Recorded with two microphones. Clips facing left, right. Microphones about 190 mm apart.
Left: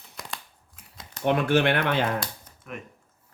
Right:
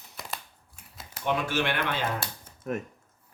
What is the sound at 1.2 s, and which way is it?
Speech, 55° left (ahead or behind).